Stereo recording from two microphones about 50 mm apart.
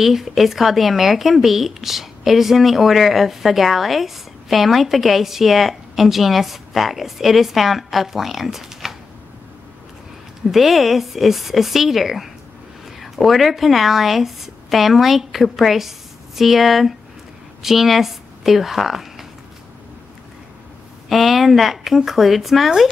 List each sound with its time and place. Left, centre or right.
0.0 s speech: centre
10.5 s speech: centre
21.1 s speech: centre